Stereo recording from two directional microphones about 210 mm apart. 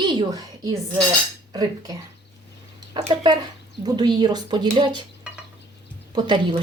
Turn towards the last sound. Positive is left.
turn(degrees=-20)  # may be behind; listen again after turning